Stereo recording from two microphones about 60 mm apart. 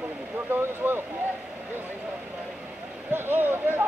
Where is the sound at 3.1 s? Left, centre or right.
Right.